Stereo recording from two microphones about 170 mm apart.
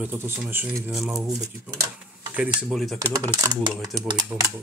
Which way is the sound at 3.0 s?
20° right (ahead or behind).